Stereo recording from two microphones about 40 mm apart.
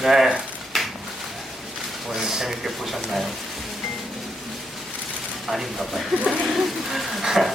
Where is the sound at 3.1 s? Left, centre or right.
Centre.